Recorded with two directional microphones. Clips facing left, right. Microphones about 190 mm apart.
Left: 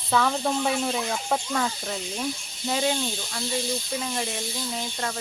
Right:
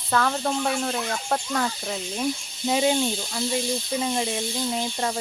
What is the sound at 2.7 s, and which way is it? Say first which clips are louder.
Speech: right 4 dB; 15° right (ahead or behind).